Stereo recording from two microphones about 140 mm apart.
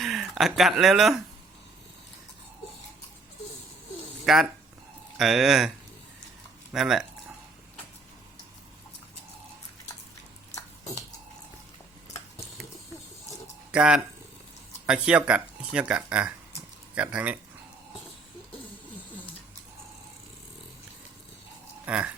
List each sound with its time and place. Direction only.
0.0 s speech: centre (ahead or behind)
4.3 s speech: 5° right (ahead or behind)
6.7 s speech: 5° right (ahead or behind)
10.5 s a sound: 20° left (ahead or behind)
13.7 s speech: 5° right (ahead or behind)
21.8 s speech: 10° right (ahead or behind)